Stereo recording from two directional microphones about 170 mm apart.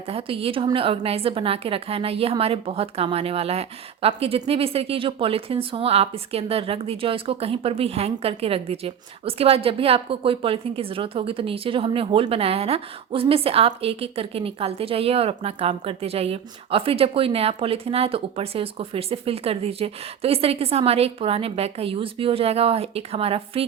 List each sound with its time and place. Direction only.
0.1 s a woman's voice: 35° right (ahead or behind)